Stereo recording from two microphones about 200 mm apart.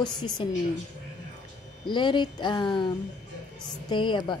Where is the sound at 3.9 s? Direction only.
25° left (ahead or behind).